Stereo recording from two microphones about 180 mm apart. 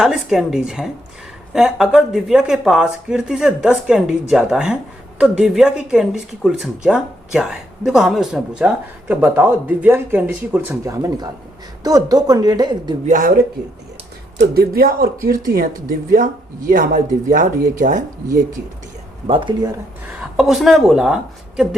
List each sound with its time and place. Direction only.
0.0 s a woman's voice: 5° right (ahead or behind); by 12.9 s 25° right (ahead or behind)
13.1 s speech: 45° right (ahead or behind)
14.4 s speech: 60° right (ahead or behind)
19.3 s a woman's voice: 25° right (ahead or behind)
20.3 s speech: centre (ahead or behind)